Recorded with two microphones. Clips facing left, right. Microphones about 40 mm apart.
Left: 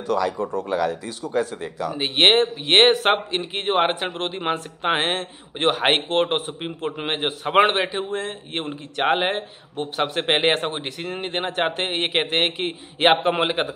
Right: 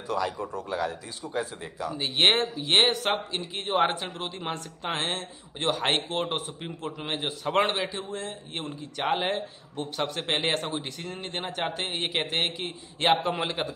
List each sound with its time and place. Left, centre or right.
0.7 s speech: left
2.0 s a man's voice: left